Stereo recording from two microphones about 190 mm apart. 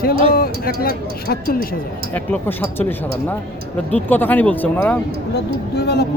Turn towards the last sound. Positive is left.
turn(degrees=60)  # may be behind; listen again after turning